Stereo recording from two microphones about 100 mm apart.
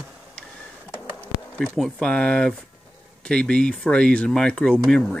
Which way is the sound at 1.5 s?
Centre (ahead or behind).